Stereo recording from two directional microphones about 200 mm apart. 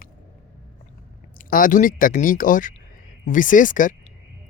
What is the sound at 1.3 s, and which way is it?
Speech, 40° left (ahead or behind).